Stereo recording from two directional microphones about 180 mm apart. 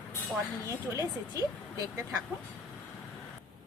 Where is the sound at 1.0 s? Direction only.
20° right (ahead or behind).